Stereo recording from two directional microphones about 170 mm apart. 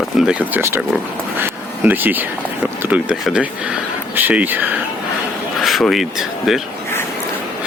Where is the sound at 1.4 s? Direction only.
10° right (ahead or behind).